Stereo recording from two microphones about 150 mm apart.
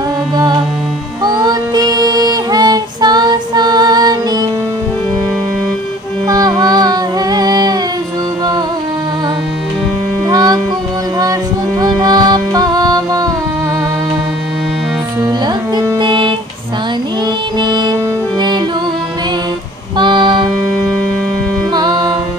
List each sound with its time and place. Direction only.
0.4 s music: 30° right (ahead or behind)
6.2 s music: 25° right (ahead or behind)
10.2 s music: 25° right (ahead or behind)
11.8 s music: 25° right (ahead or behind)
15.2 s music: 30° right (ahead or behind)
17.6 s music: 30° right (ahead or behind)
20.0 s music: 30° right (ahead or behind)
21.7 s music: 25° right (ahead or behind)